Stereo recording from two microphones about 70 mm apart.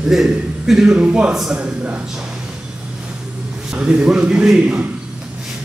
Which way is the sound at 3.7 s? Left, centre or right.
Centre.